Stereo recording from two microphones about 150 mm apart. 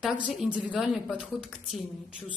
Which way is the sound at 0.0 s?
5° right (ahead or behind).